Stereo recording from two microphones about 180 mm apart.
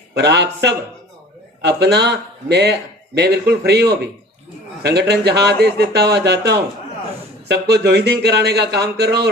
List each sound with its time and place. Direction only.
0.1 s speech: 70° right (ahead or behind)
4.8 s speech: 65° right (ahead or behind)